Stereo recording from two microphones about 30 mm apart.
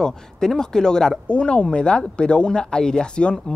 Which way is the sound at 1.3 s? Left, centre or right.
Left.